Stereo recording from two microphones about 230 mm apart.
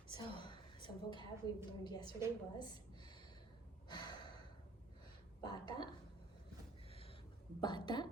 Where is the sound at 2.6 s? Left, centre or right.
Centre.